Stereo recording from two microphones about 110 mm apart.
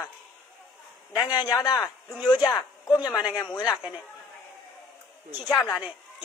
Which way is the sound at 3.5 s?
35° left (ahead or behind).